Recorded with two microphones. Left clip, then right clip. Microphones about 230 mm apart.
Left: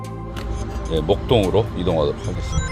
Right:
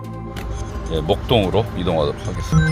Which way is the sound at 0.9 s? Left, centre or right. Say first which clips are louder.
Even; centre.